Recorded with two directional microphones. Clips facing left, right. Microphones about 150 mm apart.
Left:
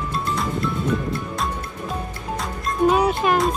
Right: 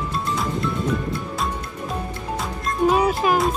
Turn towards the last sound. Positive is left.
turn(degrees=0)  # may be behind; listen again after turning